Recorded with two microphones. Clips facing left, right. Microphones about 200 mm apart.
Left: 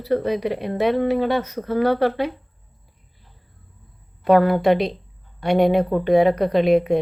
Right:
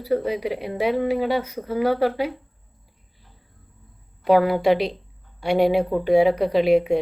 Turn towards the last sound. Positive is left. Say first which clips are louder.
# left 1 dB
turn(degrees=-10)  # may be behind; listen again after turning